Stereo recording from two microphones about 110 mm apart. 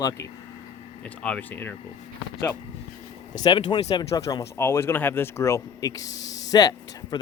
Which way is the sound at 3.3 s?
40° left (ahead or behind).